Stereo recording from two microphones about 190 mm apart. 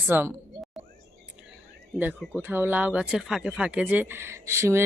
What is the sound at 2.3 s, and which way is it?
A woman's voice, 10° right (ahead or behind).